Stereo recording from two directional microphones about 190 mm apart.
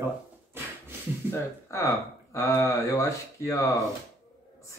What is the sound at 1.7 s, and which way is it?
Speech, 15° left (ahead or behind).